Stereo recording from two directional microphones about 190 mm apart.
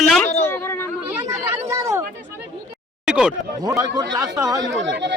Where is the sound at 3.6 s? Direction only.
20° right (ahead or behind).